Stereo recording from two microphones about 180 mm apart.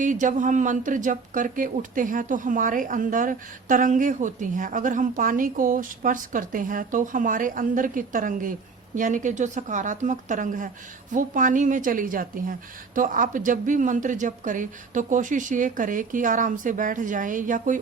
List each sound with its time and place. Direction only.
0.0 s speech: 45° right (ahead or behind)